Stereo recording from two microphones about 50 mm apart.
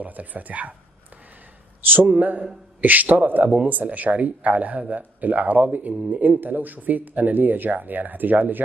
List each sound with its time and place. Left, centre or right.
0.0 s speech: right
1.9 s speech: right